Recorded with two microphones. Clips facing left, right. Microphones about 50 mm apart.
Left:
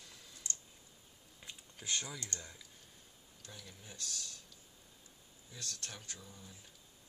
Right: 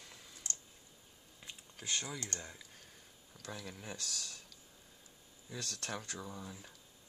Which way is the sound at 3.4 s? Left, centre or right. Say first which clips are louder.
Right 8 dB; right.